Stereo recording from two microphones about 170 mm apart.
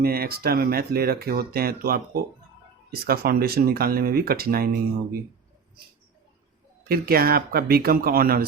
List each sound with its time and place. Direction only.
0.0 s speech: 65° right (ahead or behind)
6.8 s speech: 60° right (ahead or behind)